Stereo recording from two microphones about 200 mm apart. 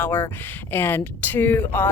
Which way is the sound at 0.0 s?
10° left (ahead or behind).